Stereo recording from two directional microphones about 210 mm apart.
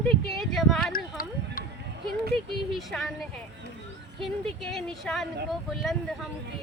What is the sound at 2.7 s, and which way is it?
Speech, centre (ahead or behind).